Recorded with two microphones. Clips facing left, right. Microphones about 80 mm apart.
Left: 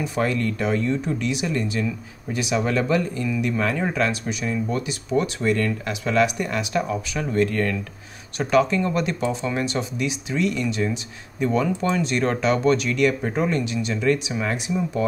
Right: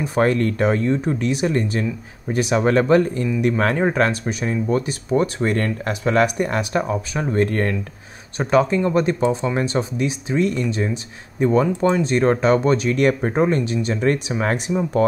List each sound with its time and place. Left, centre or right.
0.0 s speech: right